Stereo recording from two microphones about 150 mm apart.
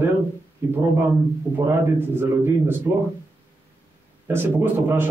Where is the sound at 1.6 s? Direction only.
15° right (ahead or behind).